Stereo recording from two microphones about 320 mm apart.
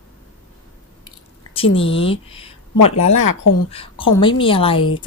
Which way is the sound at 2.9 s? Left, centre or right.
Left.